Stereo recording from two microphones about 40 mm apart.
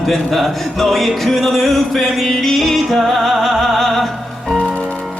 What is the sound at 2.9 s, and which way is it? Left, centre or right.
Music, centre.